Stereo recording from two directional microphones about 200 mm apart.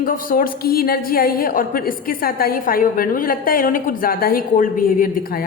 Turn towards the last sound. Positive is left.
turn(degrees=45)  # may be behind; listen again after turning